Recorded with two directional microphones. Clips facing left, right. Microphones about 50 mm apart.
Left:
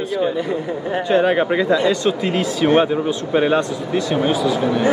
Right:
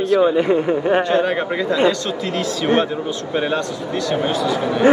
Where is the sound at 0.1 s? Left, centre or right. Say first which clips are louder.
Right 7 dB; right.